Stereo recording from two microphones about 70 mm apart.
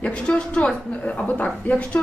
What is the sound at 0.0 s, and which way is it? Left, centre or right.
A woman's voice, centre.